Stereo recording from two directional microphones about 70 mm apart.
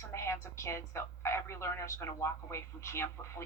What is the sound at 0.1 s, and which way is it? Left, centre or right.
A woman's voice, left.